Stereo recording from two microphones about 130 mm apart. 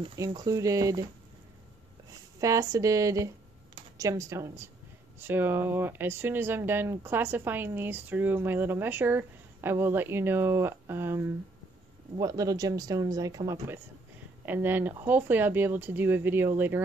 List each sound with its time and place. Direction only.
0.4 s speech: 25° right (ahead or behind)
2.4 s speech: 25° right (ahead or behind)
14.4 s speech: 15° right (ahead or behind)